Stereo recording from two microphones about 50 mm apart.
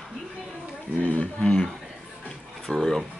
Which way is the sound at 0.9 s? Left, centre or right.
Left.